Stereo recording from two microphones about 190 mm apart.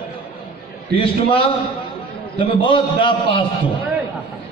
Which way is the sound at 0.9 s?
30° left (ahead or behind).